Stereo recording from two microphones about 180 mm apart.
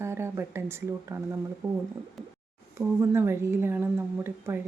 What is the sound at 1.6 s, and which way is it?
Speech, 25° right (ahead or behind).